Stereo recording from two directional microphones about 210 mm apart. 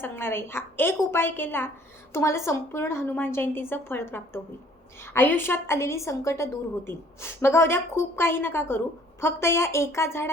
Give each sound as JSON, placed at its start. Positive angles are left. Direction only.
{"t": 0.0, "sound": "a woman's voice", "side_deg": 10}